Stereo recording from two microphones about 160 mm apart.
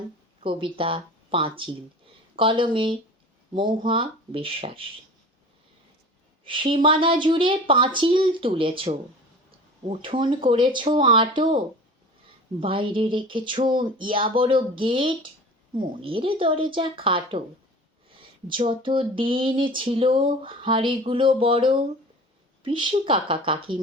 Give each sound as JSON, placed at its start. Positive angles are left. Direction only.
{"t": 0.4, "sound": "a woman's voice", "side_deg": -35}
{"t": 6.4, "sound": "a woman's voice", "side_deg": -30}
{"t": 18.1, "sound": "a sound", "side_deg": -30}
{"t": 18.7, "sound": "a woman's voice", "side_deg": -30}